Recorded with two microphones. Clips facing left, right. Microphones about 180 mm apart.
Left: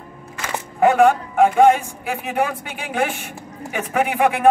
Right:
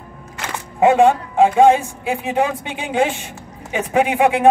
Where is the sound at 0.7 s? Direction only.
25° right (ahead or behind).